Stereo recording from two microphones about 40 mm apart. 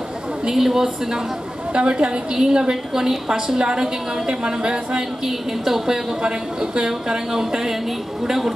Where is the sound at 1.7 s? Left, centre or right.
Right.